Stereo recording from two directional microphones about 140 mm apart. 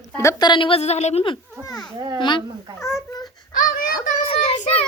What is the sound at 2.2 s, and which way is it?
Speech, 35° left (ahead or behind).